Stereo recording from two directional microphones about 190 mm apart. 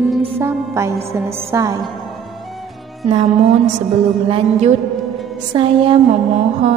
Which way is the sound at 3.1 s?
35° right (ahead or behind).